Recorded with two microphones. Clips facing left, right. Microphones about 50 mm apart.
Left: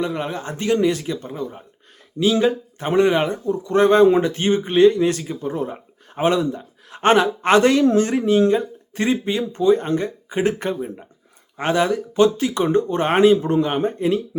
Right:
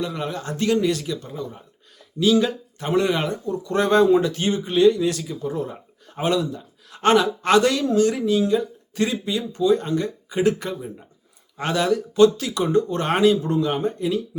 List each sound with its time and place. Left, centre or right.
0.0 s speech: left